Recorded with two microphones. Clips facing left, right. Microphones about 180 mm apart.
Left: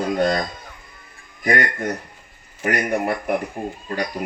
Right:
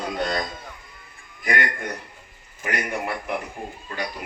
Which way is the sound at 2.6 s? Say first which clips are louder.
Left 6 dB; 45° left (ahead or behind).